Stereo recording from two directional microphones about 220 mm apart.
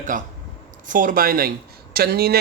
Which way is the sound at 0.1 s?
40° right (ahead or behind).